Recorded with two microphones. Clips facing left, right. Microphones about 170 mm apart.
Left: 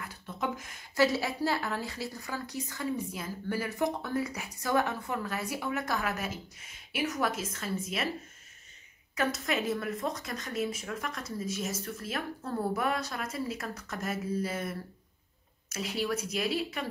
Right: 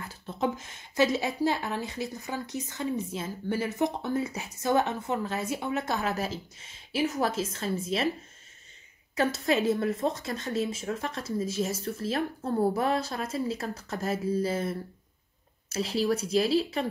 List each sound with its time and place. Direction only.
0.0 s a woman's voice: 30° right (ahead or behind)
9.1 s a woman's voice: 30° right (ahead or behind)